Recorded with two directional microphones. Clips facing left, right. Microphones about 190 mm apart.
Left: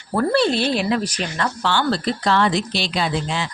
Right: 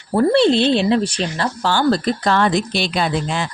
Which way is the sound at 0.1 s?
20° right (ahead or behind).